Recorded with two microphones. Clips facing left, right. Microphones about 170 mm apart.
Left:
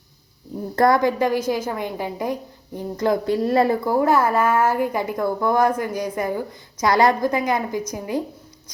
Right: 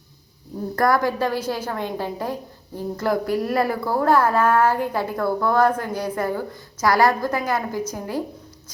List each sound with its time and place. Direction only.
0.8 s a woman's voice: 20° left (ahead or behind)